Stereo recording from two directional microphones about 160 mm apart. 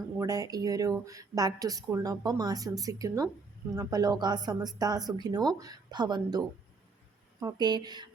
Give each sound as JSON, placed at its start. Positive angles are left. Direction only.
{"t": 0.2, "sound": "speech", "side_deg": -20}